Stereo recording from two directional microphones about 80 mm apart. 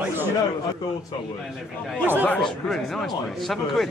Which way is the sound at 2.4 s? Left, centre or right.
Centre.